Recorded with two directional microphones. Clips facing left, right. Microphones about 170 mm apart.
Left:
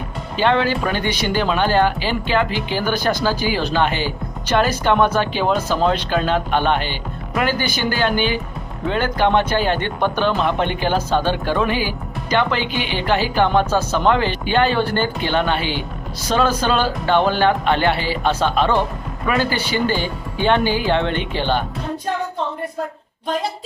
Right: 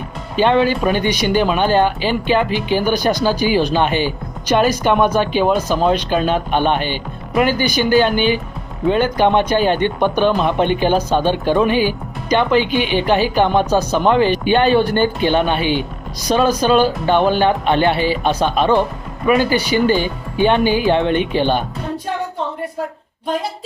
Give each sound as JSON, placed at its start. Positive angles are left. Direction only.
{"t": 0.3, "sound": "speech", "side_deg": -15}